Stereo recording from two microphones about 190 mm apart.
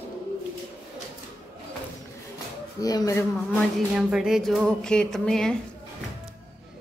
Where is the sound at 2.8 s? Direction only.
15° left (ahead or behind).